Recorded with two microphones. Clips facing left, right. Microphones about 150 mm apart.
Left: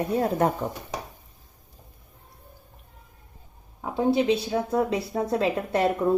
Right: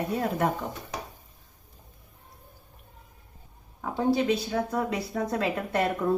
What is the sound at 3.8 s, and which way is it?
A woman's voice, 20° left (ahead or behind).